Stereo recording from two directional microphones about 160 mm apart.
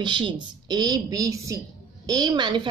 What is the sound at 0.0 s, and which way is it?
A woman's voice, 30° right (ahead or behind).